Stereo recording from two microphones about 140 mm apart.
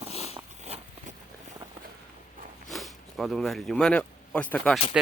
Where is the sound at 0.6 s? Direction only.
50° right (ahead or behind).